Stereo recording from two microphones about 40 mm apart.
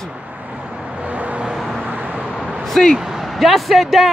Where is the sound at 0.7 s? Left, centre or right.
Right.